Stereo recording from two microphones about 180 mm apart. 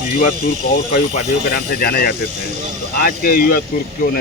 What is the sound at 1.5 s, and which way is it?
Speech, 60° left (ahead or behind).